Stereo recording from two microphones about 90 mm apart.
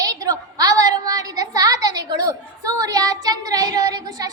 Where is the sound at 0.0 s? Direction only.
40° right (ahead or behind).